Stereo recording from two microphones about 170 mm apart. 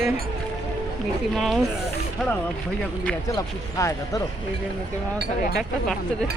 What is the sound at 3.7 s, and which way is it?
Speech, 20° left (ahead or behind).